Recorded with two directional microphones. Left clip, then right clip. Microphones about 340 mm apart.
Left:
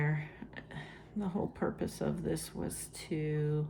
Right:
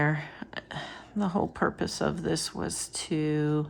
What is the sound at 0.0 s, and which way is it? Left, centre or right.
Speech, centre.